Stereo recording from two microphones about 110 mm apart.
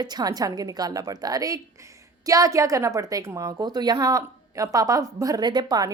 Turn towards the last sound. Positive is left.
turn(degrees=-40)  # may be behind; listen again after turning